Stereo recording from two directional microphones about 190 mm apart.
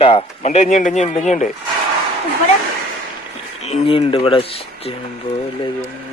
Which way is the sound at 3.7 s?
30° left (ahead or behind).